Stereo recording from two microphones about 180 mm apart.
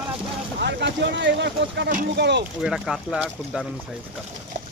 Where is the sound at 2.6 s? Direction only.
5° right (ahead or behind).